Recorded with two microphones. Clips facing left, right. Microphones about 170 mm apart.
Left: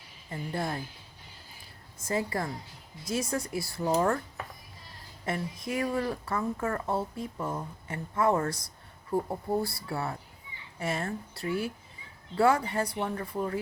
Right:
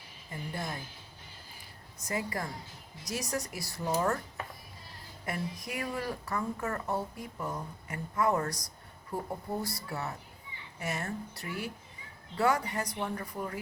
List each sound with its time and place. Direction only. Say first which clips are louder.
0.3 s a woman's voice: left 5 dB; 30° left (ahead or behind)
2.0 s speech: left 4 dB; 25° left (ahead or behind)
5.2 s speech: left 3 dB; 25° left (ahead or behind)